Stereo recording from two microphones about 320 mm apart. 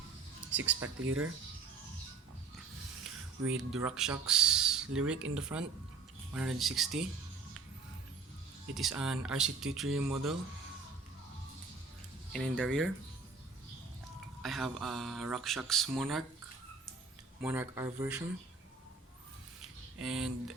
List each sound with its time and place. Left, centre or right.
0.5 s speech: centre
1.0 s speech: right
3.6 s speech: centre
8.7 s speech: centre
12.3 s speech: centre
14.4 s speech: centre
17.4 s speech: centre
20.0 s speech: centre